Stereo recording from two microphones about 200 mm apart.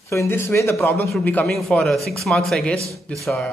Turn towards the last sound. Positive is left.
turn(degrees=0)  # may be behind; listen again after turning